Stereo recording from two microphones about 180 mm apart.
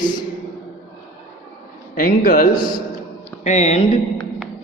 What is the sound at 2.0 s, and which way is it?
Speech, 50° left (ahead or behind).